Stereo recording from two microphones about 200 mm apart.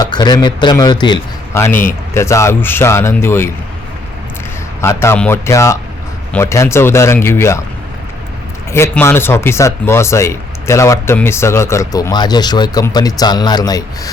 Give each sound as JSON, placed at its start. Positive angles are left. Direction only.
{"t": 0.0, "sound": "a man's voice", "side_deg": 20}
{"t": 4.8, "sound": "speech", "side_deg": 15}
{"t": 8.7, "sound": "speech", "side_deg": 15}